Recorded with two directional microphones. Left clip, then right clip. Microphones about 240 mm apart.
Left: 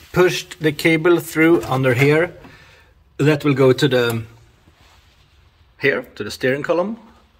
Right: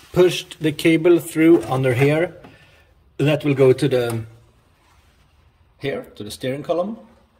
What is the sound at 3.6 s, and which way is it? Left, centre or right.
Speech, centre.